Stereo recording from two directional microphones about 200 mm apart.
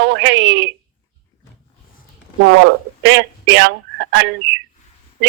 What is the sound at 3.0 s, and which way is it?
Speech, 70° right (ahead or behind).